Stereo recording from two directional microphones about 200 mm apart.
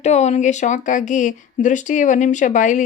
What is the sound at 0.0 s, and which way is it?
Speech, 35° left (ahead or behind).